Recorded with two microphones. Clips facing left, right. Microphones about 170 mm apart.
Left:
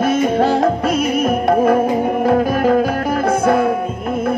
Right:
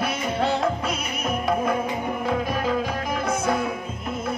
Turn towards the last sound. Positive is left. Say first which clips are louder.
# left 9 dB
turn(degrees=55)  # may be behind; listen again after turning